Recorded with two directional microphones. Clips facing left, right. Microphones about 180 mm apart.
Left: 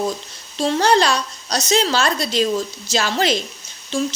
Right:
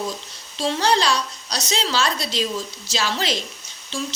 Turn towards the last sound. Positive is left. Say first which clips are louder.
# left 7 dB
turn(degrees=50)  # may be behind; listen again after turning